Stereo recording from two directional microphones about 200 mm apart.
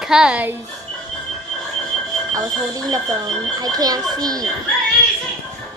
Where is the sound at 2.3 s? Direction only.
15° right (ahead or behind).